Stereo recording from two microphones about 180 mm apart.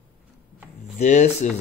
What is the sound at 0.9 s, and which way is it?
Speech, 40° left (ahead or behind).